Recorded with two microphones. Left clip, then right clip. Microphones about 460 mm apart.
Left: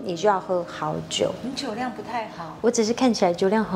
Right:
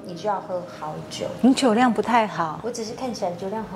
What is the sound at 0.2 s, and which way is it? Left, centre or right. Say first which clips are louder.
Speech: left 5 dB; left.